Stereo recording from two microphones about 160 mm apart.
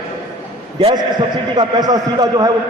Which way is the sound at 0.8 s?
30° right (ahead or behind).